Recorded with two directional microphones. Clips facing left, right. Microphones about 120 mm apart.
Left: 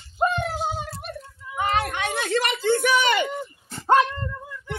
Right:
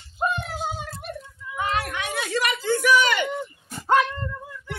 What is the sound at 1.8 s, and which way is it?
A woman's voice, 30° left (ahead or behind).